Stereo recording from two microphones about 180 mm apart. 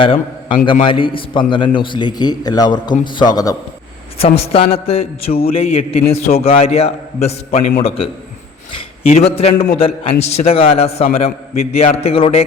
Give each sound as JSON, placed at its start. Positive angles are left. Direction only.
{"t": 0.0, "sound": "a man's voice", "side_deg": 30}
{"t": 4.2, "sound": "a man's voice", "side_deg": 35}